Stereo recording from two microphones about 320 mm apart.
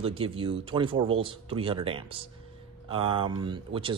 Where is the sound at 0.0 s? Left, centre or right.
Centre.